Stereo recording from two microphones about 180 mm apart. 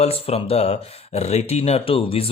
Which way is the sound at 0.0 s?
35° left (ahead or behind).